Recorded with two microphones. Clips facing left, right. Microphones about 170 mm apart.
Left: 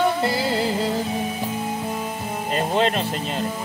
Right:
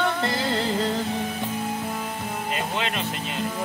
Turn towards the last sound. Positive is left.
turn(degrees=40)  # may be behind; listen again after turning